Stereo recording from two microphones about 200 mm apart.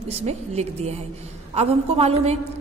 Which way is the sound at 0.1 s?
30° right (ahead or behind).